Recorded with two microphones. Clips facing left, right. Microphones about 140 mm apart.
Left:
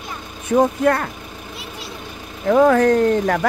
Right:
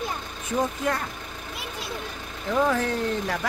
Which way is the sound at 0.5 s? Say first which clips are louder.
Left 10 dB; 70° left (ahead or behind).